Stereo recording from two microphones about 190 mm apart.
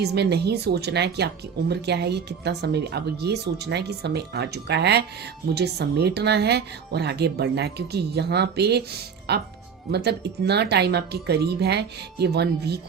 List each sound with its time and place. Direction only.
0.0 s a woman's voice: 60° right (ahead or behind)